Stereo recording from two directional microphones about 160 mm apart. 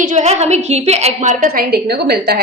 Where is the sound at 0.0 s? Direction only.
50° right (ahead or behind).